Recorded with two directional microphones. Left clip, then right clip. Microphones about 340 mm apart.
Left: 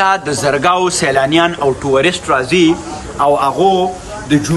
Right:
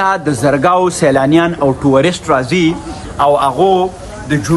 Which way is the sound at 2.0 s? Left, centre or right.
Centre.